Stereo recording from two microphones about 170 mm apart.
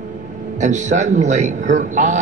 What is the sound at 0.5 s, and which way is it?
A man's voice, 45° right (ahead or behind).